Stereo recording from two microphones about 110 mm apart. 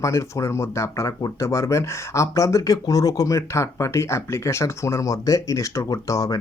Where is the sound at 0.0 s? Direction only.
30° left (ahead or behind).